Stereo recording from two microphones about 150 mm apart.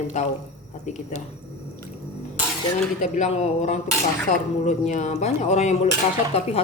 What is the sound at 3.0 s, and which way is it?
Speech, 50° left (ahead or behind).